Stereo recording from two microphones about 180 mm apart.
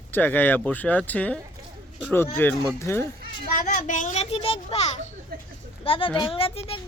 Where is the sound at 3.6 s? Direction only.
45° left (ahead or behind).